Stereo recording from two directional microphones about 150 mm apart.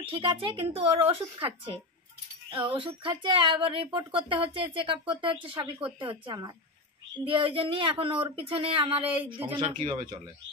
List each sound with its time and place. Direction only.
0.0 s speech: 35° right (ahead or behind)